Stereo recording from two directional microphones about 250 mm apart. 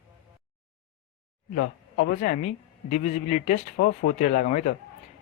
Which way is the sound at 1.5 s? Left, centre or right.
Left.